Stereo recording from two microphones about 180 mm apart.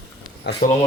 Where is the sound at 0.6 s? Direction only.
45° left (ahead or behind).